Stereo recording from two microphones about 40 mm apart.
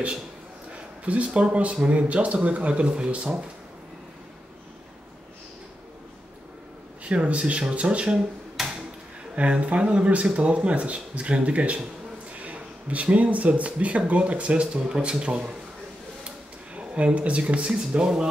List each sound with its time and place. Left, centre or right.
1.0 s speech: right
7.1 s speech: right
8.6 s tick-tock: centre
9.3 s speech: right
16.3 s a sound: right
17.7 s speech: centre